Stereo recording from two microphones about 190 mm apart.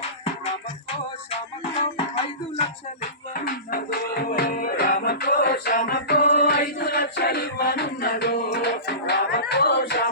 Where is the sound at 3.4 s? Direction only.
50° left (ahead or behind).